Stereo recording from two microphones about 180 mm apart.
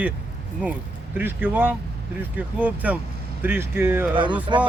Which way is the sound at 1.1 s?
10° right (ahead or behind).